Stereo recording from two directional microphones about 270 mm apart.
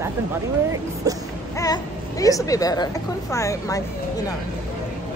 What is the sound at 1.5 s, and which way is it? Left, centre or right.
Speech, centre.